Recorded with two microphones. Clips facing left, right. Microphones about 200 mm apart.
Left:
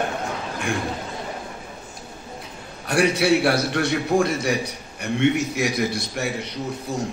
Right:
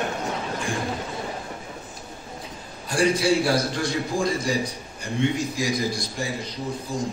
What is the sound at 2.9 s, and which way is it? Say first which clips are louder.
A man's voice: left 2 dB; 65° left (ahead or behind).